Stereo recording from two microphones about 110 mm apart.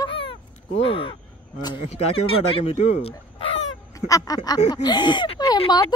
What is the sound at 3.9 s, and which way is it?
A woman's voice, 30° left (ahead or behind).